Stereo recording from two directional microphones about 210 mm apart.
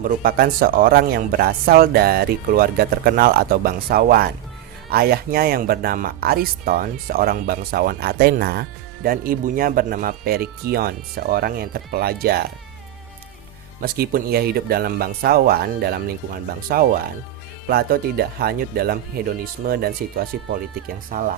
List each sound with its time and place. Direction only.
0.2 s speech: 45° right (ahead or behind)
13.8 s speech: 45° right (ahead or behind)